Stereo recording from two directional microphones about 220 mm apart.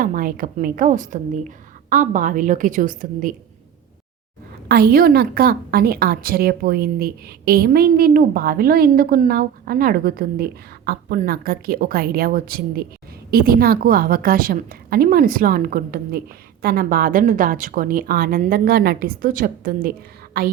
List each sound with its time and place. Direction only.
0.0 s a woman's voice: 40° right (ahead or behind)
4.7 s a woman's voice: 45° right (ahead or behind)